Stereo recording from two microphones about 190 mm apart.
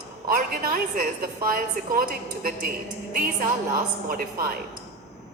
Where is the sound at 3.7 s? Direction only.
50° right (ahead or behind).